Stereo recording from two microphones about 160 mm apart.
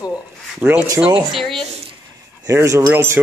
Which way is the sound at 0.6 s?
5° right (ahead or behind).